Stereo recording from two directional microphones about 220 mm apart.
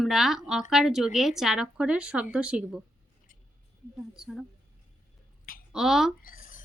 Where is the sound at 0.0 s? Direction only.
Centre (ahead or behind).